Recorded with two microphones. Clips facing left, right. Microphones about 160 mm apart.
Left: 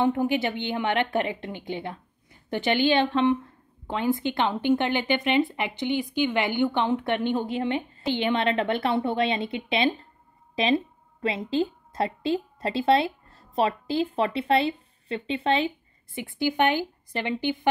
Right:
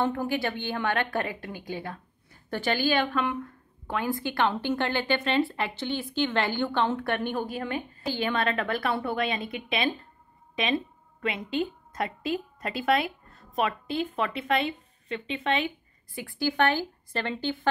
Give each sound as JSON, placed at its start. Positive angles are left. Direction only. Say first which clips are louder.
{"t": 0.0, "sound": "a woman's voice", "louder": "left 4 dB", "side_deg": 20}